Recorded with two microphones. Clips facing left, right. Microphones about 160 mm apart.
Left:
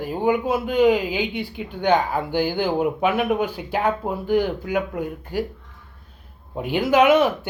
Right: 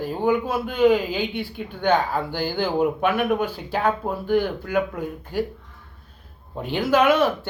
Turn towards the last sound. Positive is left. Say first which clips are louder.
# left 2 dB
turn(degrees=20)  # may be behind; listen again after turning